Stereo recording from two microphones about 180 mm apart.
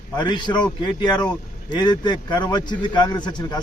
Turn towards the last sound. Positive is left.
turn(degrees=25)  # may be behind; listen again after turning